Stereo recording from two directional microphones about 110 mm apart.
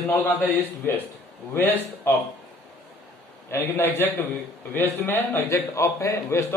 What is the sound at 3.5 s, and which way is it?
A man's voice, 20° left (ahead or behind).